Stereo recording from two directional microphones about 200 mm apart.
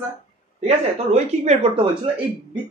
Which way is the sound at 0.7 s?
35° right (ahead or behind).